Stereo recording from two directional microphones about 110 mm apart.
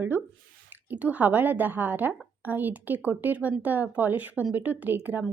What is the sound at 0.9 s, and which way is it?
A woman's voice, 15° right (ahead or behind).